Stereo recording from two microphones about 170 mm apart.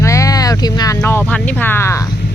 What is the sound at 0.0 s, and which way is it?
Speech, 20° left (ahead or behind).